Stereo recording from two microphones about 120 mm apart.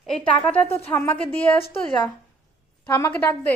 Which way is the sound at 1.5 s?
50° left (ahead or behind).